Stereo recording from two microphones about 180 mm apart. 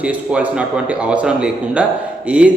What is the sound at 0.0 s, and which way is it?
A man's voice, 5° right (ahead or behind).